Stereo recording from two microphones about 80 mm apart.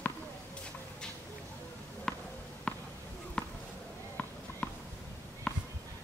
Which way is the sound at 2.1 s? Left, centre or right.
Centre.